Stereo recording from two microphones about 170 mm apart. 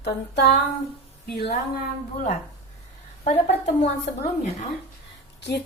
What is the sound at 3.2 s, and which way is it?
Speech, 40° left (ahead or behind).